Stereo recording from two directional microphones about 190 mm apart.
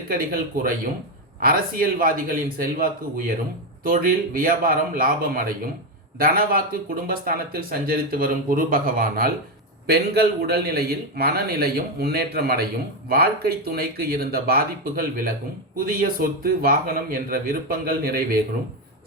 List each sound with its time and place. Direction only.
0.1 s a man's voice: 50° right (ahead or behind)